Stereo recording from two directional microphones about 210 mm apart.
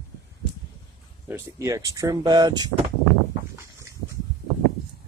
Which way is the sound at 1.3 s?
15° right (ahead or behind).